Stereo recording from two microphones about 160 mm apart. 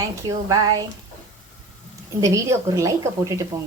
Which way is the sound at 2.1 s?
20° right (ahead or behind).